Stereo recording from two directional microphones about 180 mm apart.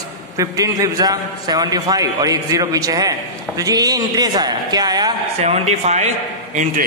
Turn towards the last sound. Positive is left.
turn(degrees=-40)  # may be behind; listen again after turning